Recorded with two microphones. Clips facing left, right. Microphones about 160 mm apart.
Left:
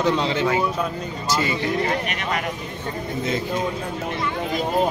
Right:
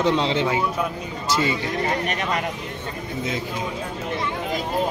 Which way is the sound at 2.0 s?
35° right (ahead or behind).